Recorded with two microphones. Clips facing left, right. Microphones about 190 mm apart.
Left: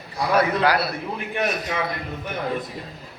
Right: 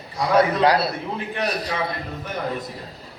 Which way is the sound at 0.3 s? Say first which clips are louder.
Right 3 dB; 25° right (ahead or behind).